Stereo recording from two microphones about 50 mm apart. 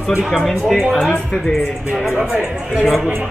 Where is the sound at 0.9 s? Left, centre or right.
Centre.